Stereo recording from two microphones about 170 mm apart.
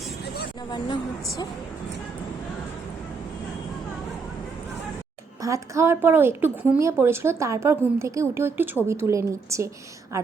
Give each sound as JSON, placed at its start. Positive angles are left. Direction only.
{"t": 0.7, "sound": "speech", "side_deg": 30}
{"t": 5.4, "sound": "a woman's voice", "side_deg": -20}